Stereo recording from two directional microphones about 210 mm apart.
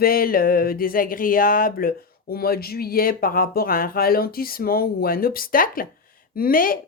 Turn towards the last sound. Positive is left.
turn(degrees=45)  # may be behind; listen again after turning